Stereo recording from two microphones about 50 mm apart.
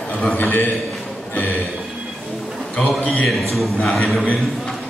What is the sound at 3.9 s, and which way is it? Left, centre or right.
Speech, centre.